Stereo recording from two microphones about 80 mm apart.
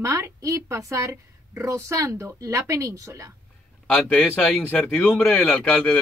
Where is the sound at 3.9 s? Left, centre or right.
Centre.